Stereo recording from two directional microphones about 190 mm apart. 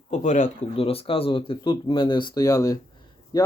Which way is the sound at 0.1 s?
40° left (ahead or behind).